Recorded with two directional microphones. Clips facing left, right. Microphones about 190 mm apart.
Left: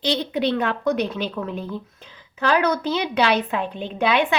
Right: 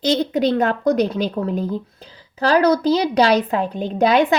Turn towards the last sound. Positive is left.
turn(degrees=-40)  # may be behind; listen again after turning